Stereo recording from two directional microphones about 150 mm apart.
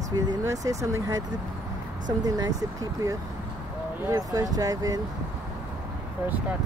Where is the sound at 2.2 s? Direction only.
25° right (ahead or behind).